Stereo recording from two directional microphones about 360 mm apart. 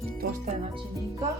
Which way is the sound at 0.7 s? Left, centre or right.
Centre.